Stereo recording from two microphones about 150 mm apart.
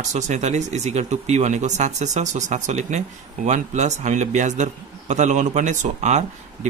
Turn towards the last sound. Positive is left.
turn(degrees=-50)  # may be behind; listen again after turning